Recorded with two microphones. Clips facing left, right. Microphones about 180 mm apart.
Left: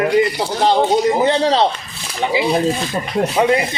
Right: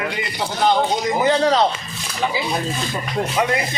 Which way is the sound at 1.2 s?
25° left (ahead or behind).